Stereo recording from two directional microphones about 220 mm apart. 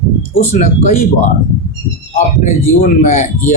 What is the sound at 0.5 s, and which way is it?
Speech, 40° left (ahead or behind).